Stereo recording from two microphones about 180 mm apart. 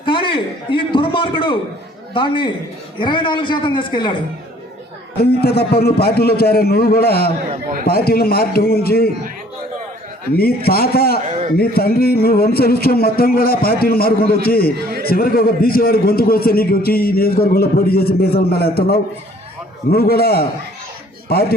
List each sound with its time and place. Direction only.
0.0 s a sound: 30° left (ahead or behind)
2.1 s a man's voice: 30° left (ahead or behind)
5.2 s a man's voice: 60° left (ahead or behind)
10.3 s a man's voice: 60° left (ahead or behind)